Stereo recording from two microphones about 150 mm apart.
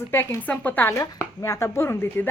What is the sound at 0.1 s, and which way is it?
A woman's voice, 15° left (ahead or behind).